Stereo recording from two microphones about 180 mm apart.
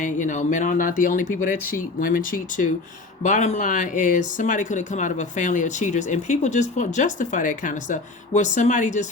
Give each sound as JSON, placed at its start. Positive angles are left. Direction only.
{"t": 0.0, "sound": "speech", "side_deg": 45}